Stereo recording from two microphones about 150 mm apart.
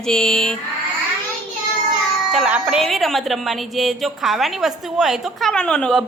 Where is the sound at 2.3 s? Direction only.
5° right (ahead or behind).